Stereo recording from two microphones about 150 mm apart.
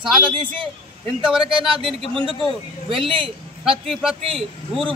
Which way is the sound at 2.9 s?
35° right (ahead or behind).